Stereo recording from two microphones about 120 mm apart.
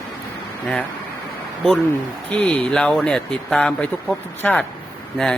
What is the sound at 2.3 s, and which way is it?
Speech, 10° left (ahead or behind).